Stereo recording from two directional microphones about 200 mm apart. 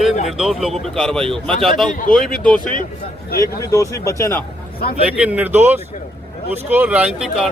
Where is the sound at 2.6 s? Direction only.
40° left (ahead or behind).